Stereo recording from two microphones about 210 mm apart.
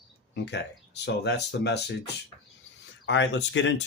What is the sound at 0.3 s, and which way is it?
Speech, 55° left (ahead or behind).